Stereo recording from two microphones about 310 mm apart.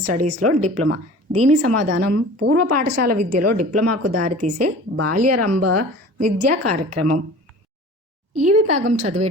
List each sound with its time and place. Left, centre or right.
0.0 s a woman's voice: right
8.6 s a woman's voice: right